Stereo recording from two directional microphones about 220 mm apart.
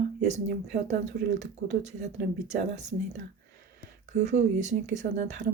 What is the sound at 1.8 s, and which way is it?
Speech, 30° right (ahead or behind).